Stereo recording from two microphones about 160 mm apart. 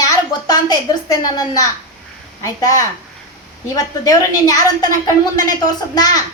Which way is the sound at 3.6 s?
20° left (ahead or behind).